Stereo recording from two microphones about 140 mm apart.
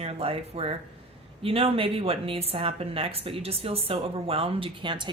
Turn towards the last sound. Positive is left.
turn(degrees=-40)  # may be behind; listen again after turning